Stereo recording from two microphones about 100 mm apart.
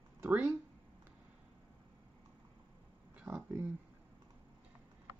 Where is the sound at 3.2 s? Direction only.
25° right (ahead or behind).